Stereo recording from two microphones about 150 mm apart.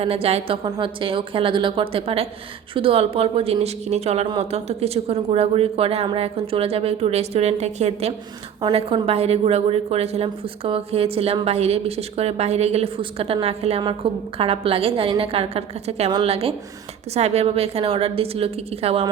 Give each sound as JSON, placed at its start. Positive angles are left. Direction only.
{"t": 0.0, "sound": "a woman's voice", "side_deg": -40}